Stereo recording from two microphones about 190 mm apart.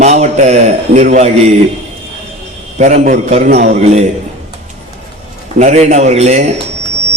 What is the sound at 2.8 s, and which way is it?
A man's voice, 40° right (ahead or behind).